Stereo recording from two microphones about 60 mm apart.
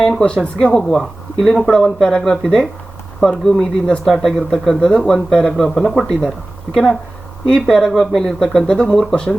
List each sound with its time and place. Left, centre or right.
0.0 s speech: centre
0.3 s speech: centre
0.7 s speech: centre
7.5 s speech: centre